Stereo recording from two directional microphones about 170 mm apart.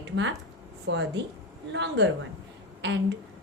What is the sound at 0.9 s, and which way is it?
A woman's voice, 90° right.